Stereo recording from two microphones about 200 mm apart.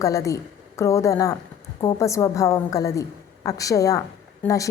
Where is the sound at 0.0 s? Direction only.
15° left (ahead or behind).